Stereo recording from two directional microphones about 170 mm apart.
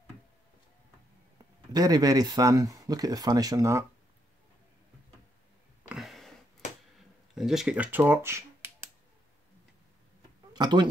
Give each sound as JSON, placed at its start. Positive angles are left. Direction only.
{"t": 1.7, "sound": "speech", "side_deg": -20}
{"t": 5.9, "sound": "a sound", "side_deg": 0}
{"t": 7.3, "sound": "speech", "side_deg": 0}
{"t": 10.5, "sound": "speech", "side_deg": -25}